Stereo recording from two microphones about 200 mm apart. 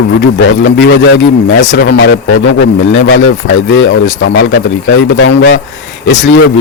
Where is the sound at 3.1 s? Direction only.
80° left.